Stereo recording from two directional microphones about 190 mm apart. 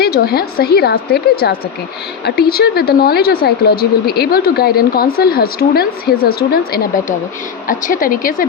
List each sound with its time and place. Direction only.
0.0 s a woman's voice: 55° left (ahead or behind)